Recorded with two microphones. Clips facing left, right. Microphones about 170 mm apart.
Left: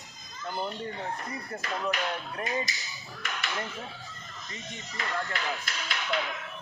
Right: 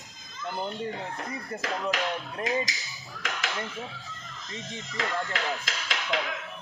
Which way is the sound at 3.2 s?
90° right.